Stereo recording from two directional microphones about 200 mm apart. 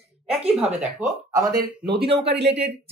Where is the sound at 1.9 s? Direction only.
25° right (ahead or behind).